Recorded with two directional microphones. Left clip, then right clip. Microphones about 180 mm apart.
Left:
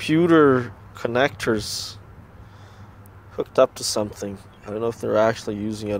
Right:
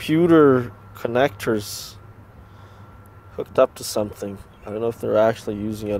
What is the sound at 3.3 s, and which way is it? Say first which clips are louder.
Speech: even; 5° right (ahead or behind).